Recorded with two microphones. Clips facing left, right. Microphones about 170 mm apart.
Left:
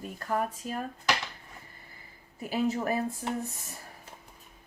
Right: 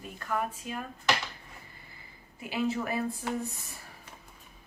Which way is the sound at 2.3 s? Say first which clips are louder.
Left 2 dB; 40° left (ahead or behind).